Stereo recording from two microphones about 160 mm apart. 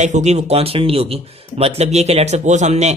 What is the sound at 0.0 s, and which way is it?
Speech, 45° right (ahead or behind).